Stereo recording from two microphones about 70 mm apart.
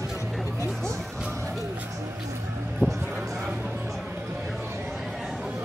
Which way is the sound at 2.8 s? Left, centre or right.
Right.